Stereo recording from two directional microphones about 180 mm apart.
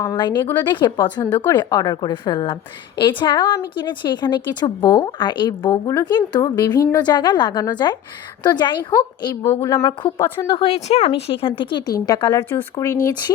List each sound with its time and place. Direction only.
0.0 s a woman's voice: 20° left (ahead or behind)